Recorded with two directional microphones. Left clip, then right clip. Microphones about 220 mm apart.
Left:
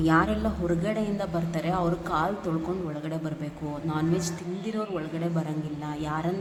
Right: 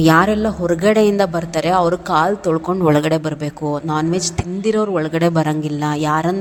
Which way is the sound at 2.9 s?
45° right (ahead or behind).